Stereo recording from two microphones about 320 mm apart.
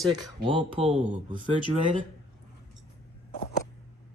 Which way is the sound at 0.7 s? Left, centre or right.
Centre.